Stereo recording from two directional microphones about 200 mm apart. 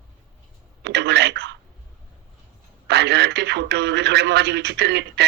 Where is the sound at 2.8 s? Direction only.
55° right (ahead or behind).